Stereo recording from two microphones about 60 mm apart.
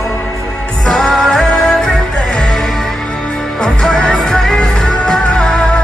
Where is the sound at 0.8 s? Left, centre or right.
Centre.